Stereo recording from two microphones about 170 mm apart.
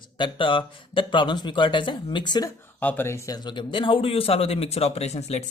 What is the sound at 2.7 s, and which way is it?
Speech, 10° left (ahead or behind).